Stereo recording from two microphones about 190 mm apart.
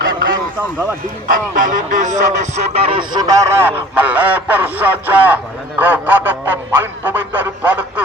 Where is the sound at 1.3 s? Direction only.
40° right (ahead or behind).